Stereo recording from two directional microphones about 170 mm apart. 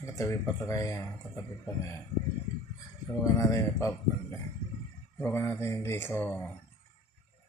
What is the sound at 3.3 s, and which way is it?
Speech, 20° left (ahead or behind).